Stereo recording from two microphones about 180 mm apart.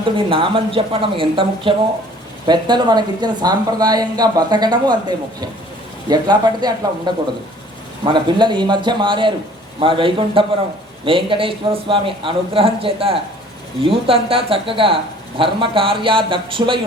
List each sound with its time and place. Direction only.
0.0 s a woman's voice: 30° right (ahead or behind)